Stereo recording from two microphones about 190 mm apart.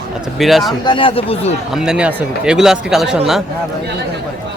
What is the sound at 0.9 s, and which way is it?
Speech, 25° left (ahead or behind).